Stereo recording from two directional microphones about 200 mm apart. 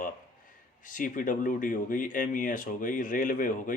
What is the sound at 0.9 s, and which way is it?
Speech, 40° left (ahead or behind).